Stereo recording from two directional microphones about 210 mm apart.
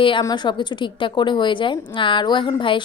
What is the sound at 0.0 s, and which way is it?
A woman's voice, 20° left (ahead or behind).